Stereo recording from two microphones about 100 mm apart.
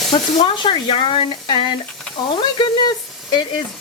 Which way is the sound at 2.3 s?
45° left (ahead or behind).